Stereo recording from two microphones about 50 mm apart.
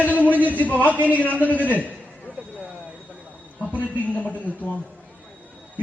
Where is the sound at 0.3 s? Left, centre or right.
Right.